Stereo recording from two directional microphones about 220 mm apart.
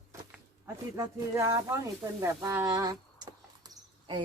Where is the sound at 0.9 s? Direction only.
15° right (ahead or behind).